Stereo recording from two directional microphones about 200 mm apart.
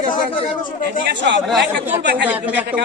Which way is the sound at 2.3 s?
10° right (ahead or behind).